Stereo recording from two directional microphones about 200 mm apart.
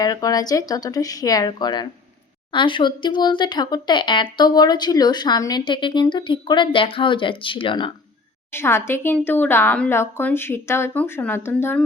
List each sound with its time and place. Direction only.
0.0 s a woman's voice: 20° left (ahead or behind)
8.5 s a woman's voice: 10° left (ahead or behind)